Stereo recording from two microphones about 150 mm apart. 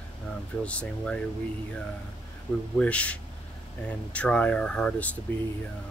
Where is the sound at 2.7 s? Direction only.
10° left (ahead or behind).